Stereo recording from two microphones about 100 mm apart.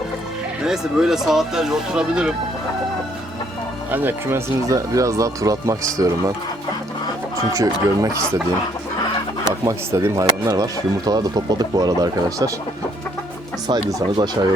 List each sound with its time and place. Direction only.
0.6 s speech: 5° right (ahead or behind)
3.9 s speech: 20° right (ahead or behind)
7.5 s speech: 35° right (ahead or behind)
9.4 s speech: 35° right (ahead or behind)
10.5 s speech: 40° right (ahead or behind)
13.7 s speech: 45° right (ahead or behind)